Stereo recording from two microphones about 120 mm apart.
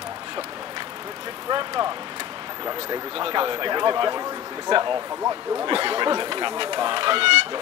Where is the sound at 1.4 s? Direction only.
35° right (ahead or behind).